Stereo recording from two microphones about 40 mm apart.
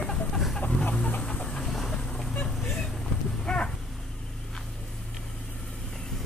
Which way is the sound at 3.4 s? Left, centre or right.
Left.